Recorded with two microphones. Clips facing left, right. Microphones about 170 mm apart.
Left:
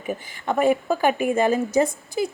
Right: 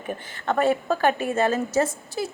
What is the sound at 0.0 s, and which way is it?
A woman's voice, 10° left (ahead or behind).